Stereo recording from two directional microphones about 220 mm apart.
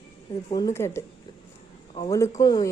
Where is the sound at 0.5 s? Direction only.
15° left (ahead or behind).